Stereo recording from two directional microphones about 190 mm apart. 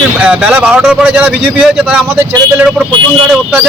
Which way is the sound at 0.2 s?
5° right (ahead or behind).